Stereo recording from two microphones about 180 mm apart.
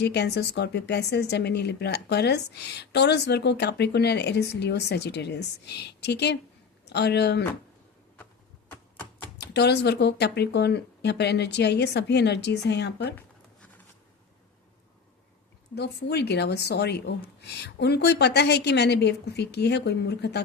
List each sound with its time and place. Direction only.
0.0 s speech: 70° left (ahead or behind)
9.4 s speech: 70° left (ahead or behind)
15.7 s speech: 70° left (ahead or behind)